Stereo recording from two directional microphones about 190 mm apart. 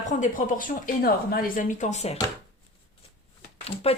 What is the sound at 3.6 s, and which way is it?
Speech, 30° left (ahead or behind).